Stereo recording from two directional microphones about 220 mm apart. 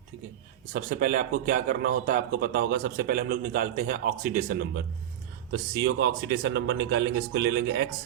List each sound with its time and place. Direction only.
0.7 s a man's voice: 35° right (ahead or behind)
5.5 s a man's voice: 55° right (ahead or behind)